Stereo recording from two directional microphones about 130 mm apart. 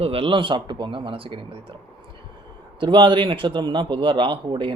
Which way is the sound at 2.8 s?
40° right (ahead or behind).